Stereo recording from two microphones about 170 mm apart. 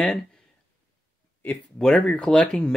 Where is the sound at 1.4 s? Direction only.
5° left (ahead or behind).